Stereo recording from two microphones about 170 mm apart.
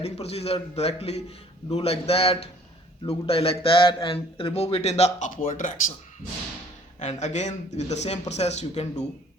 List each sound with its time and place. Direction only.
0.0 s speech: 35° left (ahead or behind)
7.0 s speech: 40° left (ahead or behind)